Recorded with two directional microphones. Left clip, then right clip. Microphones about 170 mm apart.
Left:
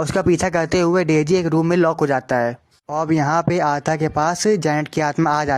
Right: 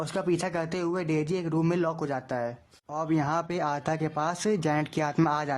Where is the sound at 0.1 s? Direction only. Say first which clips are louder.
Left 11 dB; 40° left (ahead or behind).